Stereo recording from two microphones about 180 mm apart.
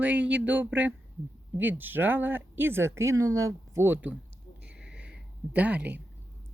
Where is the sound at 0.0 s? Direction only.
10° right (ahead or behind).